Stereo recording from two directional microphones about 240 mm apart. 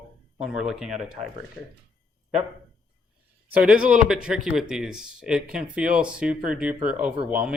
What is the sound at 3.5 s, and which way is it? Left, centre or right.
Speech, centre.